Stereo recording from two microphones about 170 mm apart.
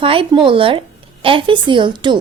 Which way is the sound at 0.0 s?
30° right (ahead or behind).